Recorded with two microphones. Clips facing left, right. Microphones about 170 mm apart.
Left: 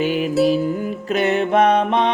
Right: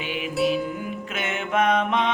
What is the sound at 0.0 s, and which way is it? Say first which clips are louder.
Music: left 8 dB; 40° left (ahead or behind).